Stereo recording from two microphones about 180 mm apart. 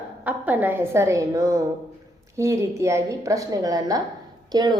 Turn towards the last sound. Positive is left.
turn(degrees=-25)  # may be behind; listen again after turning